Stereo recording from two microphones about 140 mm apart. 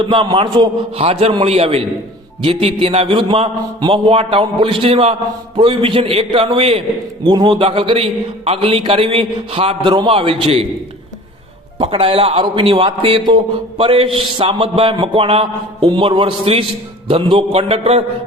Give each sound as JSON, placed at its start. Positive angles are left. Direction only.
{"t": 0.0, "sound": "a man's voice", "side_deg": -35}
{"t": 0.9, "sound": "a man's voice", "side_deg": -45}
{"t": 11.8, "sound": "a man's voice", "side_deg": -40}